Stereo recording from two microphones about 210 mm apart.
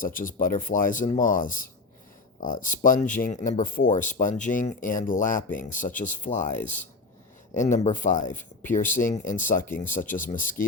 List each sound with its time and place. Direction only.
0.0 s speech: 40° left (ahead or behind)
7.5 s speech: 35° left (ahead or behind)
9.0 s speech: 15° left (ahead or behind)
9.3 s speech: 40° left (ahead or behind)